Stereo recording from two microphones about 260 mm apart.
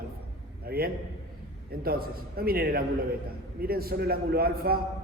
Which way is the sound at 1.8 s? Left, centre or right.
Right.